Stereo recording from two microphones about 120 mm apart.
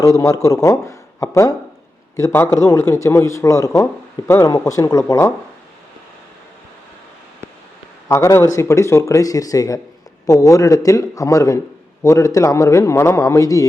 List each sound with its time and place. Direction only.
0.0 s speech: 25° left (ahead or behind)
8.0 s speech: 25° left (ahead or behind)